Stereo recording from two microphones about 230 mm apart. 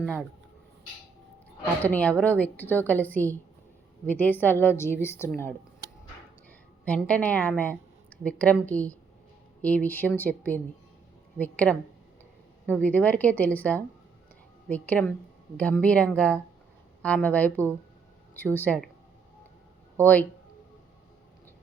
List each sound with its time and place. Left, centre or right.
0.0 s speech: centre
1.8 s a woman's voice: centre
6.8 s a woman's voice: centre